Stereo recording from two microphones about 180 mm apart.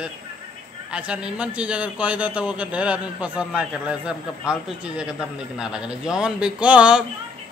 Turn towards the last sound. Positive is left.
turn(degrees=-5)  # may be behind; listen again after turning